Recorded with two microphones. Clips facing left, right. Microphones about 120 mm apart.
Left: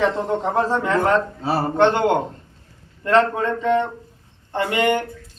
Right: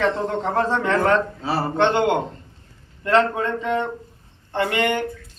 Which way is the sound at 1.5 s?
45° left (ahead or behind).